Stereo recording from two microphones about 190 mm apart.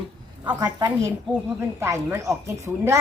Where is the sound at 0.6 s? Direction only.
20° right (ahead or behind).